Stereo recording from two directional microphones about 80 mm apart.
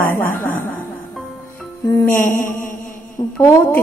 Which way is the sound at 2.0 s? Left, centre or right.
Left.